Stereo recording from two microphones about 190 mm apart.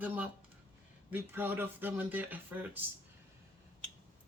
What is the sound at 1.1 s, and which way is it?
Speech, 10° right (ahead or behind).